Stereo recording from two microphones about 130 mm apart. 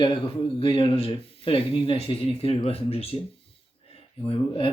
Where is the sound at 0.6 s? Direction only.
40° left (ahead or behind).